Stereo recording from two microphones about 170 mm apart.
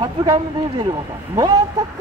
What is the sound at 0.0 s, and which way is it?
Speech, 25° right (ahead or behind).